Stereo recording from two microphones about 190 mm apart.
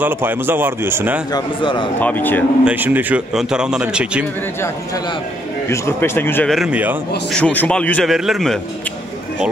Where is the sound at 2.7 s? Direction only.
10° right (ahead or behind).